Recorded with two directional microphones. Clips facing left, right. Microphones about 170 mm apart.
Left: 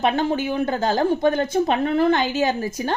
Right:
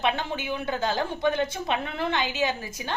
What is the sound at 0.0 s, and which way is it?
A woman's voice, 40° left (ahead or behind).